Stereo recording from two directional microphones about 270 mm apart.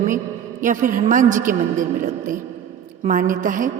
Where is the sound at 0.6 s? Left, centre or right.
Right.